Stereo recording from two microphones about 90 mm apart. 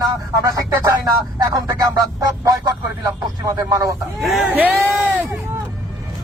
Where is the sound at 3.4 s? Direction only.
40° right (ahead or behind).